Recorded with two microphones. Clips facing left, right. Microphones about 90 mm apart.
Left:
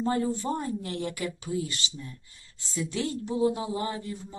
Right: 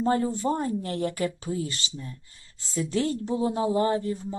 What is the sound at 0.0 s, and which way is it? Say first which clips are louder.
Speech: right 3 dB; 35° right (ahead or behind).